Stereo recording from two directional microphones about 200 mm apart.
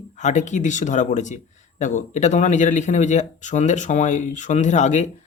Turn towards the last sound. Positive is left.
turn(degrees=35)  # may be behind; listen again after turning